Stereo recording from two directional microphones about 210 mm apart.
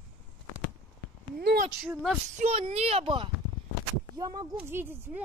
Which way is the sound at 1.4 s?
50° right (ahead or behind).